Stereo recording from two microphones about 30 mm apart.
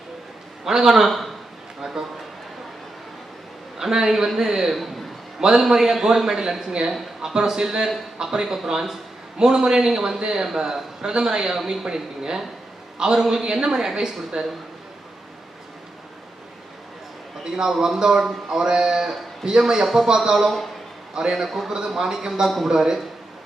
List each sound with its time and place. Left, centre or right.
0.6 s a man's voice: centre
1.8 s a sound: centre
3.8 s a man's voice: centre
11.0 s speech: right
17.7 s speech: centre
21.4 s a man's voice: centre
21.7 s speech: right
22.4 s a man's voice: centre
22.7 s speech: centre